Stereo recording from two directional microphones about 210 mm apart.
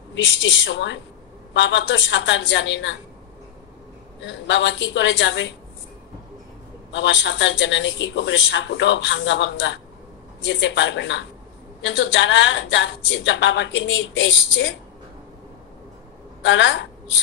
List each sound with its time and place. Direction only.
0.1 s a man's voice: 60° left (ahead or behind)
4.2 s a man's voice: 60° left (ahead or behind)
6.9 s a man's voice: 60° left (ahead or behind)
16.4 s a man's voice: 60° left (ahead or behind)